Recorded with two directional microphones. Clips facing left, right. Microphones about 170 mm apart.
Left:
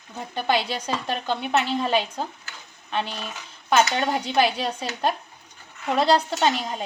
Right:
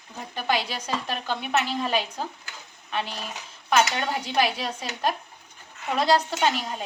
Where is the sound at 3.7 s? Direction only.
30° left (ahead or behind).